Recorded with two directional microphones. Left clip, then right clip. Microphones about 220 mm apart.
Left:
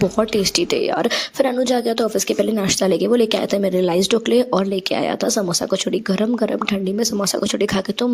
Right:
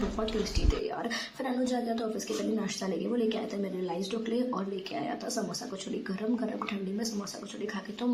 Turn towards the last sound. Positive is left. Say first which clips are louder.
# left 14 dB
turn(degrees=40)  # may be behind; listen again after turning